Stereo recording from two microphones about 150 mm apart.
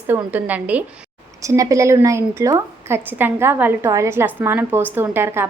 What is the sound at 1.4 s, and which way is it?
A woman's voice, 20° right (ahead or behind).